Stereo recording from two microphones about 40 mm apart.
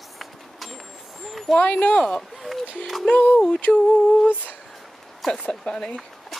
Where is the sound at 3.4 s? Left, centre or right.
Left.